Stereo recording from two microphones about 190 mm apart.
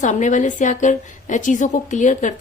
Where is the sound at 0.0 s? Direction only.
40° left (ahead or behind).